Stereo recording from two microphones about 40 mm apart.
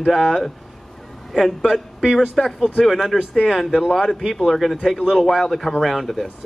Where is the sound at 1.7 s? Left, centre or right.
Centre.